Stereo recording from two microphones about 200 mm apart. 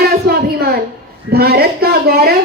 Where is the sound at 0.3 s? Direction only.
50° right (ahead or behind).